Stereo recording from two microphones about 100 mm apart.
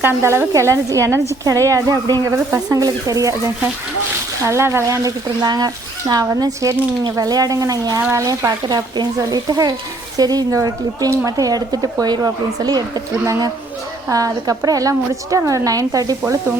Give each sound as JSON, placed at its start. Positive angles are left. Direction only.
{"t": 0.0, "sound": "a woman's voice", "side_deg": -25}
{"t": 8.6, "sound": "speech", "side_deg": -45}